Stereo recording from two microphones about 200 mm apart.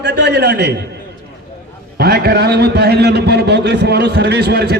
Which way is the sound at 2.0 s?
50° right (ahead or behind).